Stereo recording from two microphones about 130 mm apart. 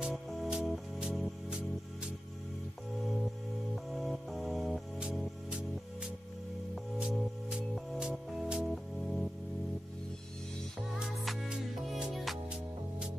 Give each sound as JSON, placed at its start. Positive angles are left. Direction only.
{"t": 0.0, "sound": "music", "side_deg": 0}
{"t": 3.7, "sound": "music", "side_deg": 0}
{"t": 10.8, "sound": "music", "side_deg": 0}